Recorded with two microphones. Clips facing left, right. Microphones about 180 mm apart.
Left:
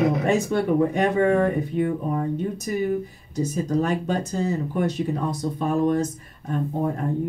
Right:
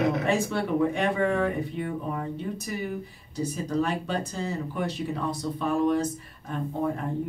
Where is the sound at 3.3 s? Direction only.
40° left (ahead or behind).